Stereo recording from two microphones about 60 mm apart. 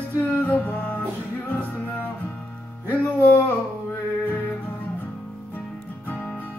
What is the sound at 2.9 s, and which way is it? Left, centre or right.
Music, left.